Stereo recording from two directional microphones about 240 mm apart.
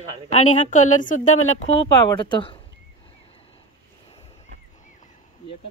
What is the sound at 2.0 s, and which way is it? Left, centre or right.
Speech, centre.